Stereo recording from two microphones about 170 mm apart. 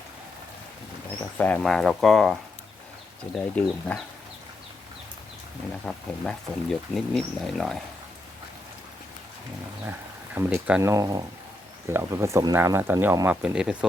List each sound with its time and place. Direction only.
1.4 s speech: 5° left (ahead or behind)
5.8 s speech: 5° left (ahead or behind)
10.3 s speech: 10° right (ahead or behind)